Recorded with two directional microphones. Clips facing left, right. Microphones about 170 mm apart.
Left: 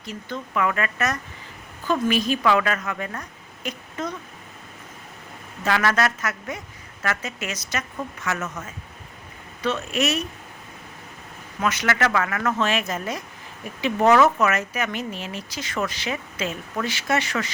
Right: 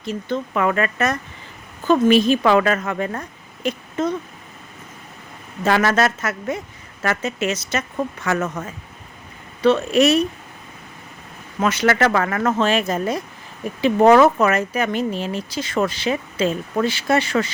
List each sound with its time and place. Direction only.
0.0 s a woman's voice: 25° right (ahead or behind)
5.6 s a woman's voice: 25° right (ahead or behind)
8.6 s speech: 55° right (ahead or behind)
9.6 s speech: 30° right (ahead or behind)
11.6 s speech: 30° right (ahead or behind)